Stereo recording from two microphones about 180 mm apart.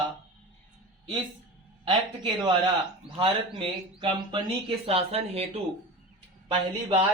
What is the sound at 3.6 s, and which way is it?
Speech, 30° right (ahead or behind).